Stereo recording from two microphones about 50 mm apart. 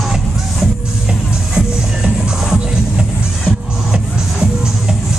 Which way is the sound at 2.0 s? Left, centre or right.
Centre.